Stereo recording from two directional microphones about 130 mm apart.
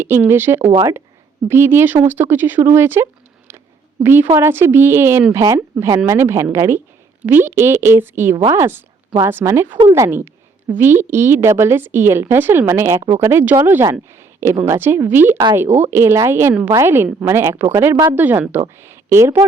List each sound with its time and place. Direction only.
0.0 s a woman's voice: 20° right (ahead or behind)